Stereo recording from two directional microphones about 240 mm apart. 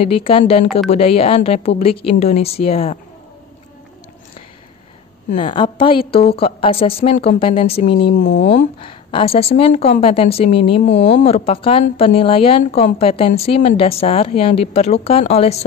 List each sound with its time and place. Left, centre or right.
0.0 s a woman's voice: left
5.4 s a woman's voice: left
8.2 s speech: left
8.5 s a woman's voice: left